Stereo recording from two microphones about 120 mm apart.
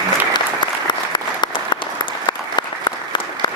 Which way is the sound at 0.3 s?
35° left (ahead or behind).